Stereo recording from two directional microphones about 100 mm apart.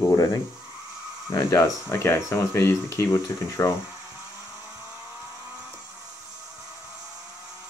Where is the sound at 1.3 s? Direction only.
30° left (ahead or behind).